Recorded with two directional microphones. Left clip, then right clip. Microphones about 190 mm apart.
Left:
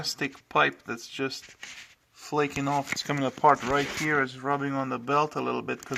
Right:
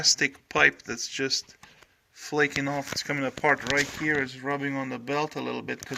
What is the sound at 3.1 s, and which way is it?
Speech, 30° left (ahead or behind).